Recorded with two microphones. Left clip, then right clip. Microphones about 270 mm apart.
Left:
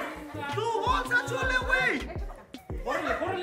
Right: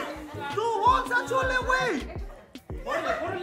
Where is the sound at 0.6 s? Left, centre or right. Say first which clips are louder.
Right 5 dB; centre.